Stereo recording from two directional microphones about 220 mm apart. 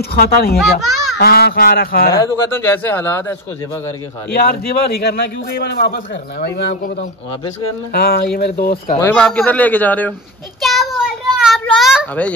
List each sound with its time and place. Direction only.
0.0 s speech: 45° left (ahead or behind)
0.6 s a child's voice: centre (ahead or behind)
1.1 s speech: 45° left (ahead or behind)
2.1 s speech: 10° left (ahead or behind)
4.3 s speech: 45° left (ahead or behind)
6.7 s a man's voice: 35° left (ahead or behind)
8.9 s speech: 10° left (ahead or behind)
10.6 s a sound: centre (ahead or behind)